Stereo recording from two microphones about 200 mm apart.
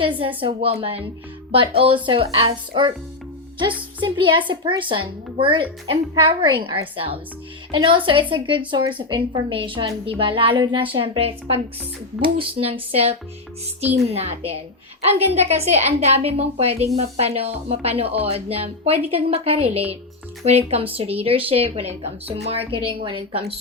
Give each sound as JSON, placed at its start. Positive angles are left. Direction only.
{"t": 0.0, "sound": "speech", "side_deg": -25}